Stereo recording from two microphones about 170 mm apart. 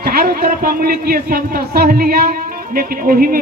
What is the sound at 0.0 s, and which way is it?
A man's voice, 60° right (ahead or behind).